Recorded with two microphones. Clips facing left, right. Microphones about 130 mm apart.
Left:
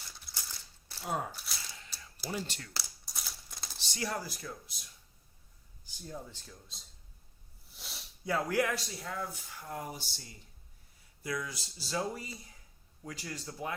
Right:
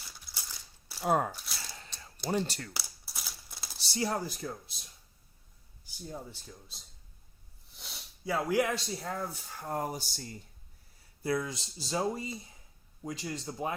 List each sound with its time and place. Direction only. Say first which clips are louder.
1.0 s speech: right 8 dB; 60° right (ahead or behind)
1.3 s coin: right 2 dB; centre (ahead or behind)
1.6 s a sound: right 3 dB; 35° right (ahead or behind)
2.0 s speech: right 7 dB; 35° right (ahead or behind)
2.7 s coin: right 1 dB; 5° right (ahead or behind)
3.8 s speech: right 5 dB; 35° right (ahead or behind)
6.0 s speech: right 2 dB; 15° right (ahead or behind)
7.7 s a sound: even; centre (ahead or behind)
8.5 s speech: right 2 dB; 20° right (ahead or behind)
9.0 s speech: right 3 dB; 40° right (ahead or behind)
11.2 s speech: right 6 dB; 30° right (ahead or behind)